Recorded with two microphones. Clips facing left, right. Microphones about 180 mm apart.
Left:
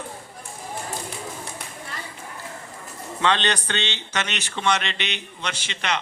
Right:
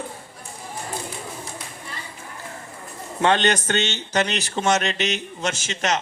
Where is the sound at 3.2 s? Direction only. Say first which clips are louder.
Right 4 dB; 45° right (ahead or behind).